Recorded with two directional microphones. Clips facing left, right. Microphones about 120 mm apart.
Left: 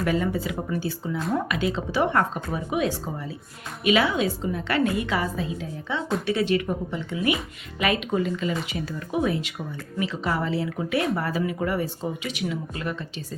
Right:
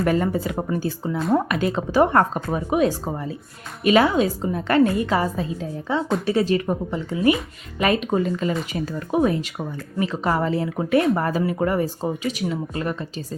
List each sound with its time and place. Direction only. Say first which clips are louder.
0.0 s speech: right 4 dB; 45° right (ahead or behind)